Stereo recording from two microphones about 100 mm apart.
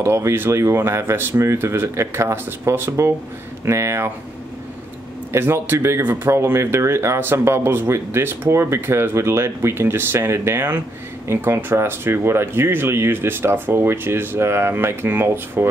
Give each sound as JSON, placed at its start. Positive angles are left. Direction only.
{"t": 0.0, "sound": "speech", "side_deg": -25}
{"t": 5.3, "sound": "speech", "side_deg": -25}